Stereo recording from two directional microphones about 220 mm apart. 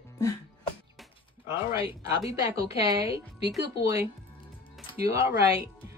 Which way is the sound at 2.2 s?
15° right (ahead or behind).